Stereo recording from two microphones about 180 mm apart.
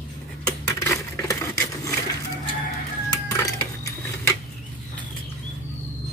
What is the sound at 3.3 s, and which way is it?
Sewing machine, 15° left (ahead or behind).